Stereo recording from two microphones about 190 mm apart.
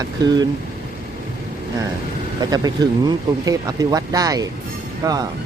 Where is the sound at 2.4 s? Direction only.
20° right (ahead or behind).